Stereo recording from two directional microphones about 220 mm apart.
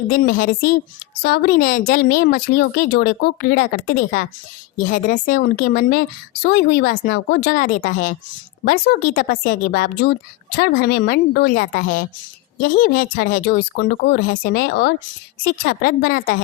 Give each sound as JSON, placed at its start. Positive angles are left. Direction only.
{"t": 0.1, "sound": "a woman's voice", "side_deg": 40}